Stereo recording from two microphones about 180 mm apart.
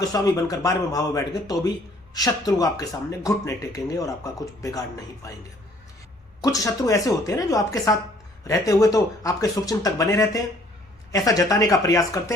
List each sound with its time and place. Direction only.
0.1 s speech: 20° left (ahead or behind)
6.4 s speech: 20° left (ahead or behind)